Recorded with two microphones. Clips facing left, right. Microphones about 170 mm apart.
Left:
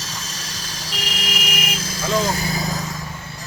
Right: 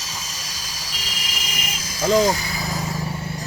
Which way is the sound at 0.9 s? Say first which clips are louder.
Left 8 dB; 60° left (ahead or behind).